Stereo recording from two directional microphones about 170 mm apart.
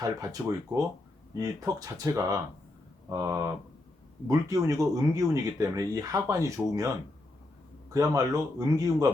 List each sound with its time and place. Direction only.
0.0 s speech: 20° right (ahead or behind)
7.9 s speech: 20° right (ahead or behind)